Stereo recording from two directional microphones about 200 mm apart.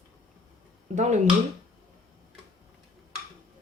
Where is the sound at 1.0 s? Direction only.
35° right (ahead or behind).